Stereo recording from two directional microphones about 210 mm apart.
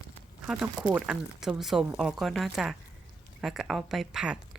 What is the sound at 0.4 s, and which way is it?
Speech, 5° right (ahead or behind).